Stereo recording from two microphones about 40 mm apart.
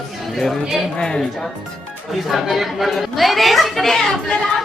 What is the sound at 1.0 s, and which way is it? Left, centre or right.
Speech, centre.